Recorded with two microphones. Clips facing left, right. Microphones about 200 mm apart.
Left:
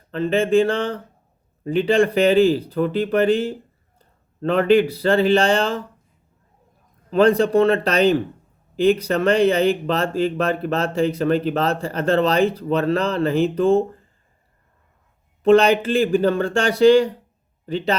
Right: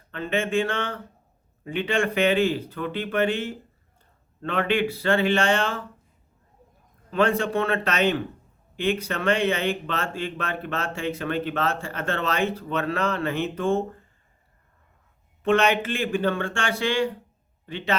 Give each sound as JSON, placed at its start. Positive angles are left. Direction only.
{"t": 0.1, "sound": "speech", "side_deg": 35}
{"t": 7.1, "sound": "speech", "side_deg": 35}
{"t": 15.4, "sound": "speech", "side_deg": 35}